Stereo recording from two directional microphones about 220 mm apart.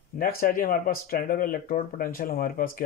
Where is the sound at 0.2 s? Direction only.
40° left (ahead or behind).